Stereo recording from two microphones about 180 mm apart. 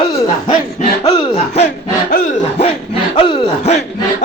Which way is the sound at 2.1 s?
50° left (ahead or behind).